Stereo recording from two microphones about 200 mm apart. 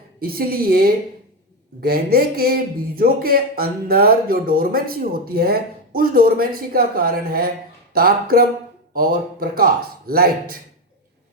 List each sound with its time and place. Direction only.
0.2 s speech: 50° right (ahead or behind)